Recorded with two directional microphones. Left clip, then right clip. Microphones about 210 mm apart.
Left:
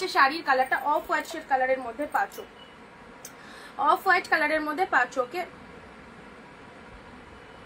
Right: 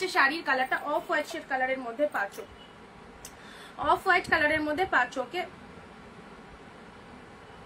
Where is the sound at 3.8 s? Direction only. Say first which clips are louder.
Left 2 dB; 10° right (ahead or behind).